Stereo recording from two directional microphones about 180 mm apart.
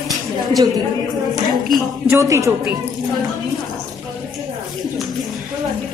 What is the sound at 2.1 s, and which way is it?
Speech, 15° right (ahead or behind).